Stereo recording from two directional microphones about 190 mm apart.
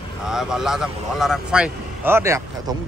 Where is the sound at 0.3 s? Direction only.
5° right (ahead or behind).